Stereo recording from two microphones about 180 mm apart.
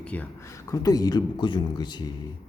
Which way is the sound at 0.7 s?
20° left (ahead or behind).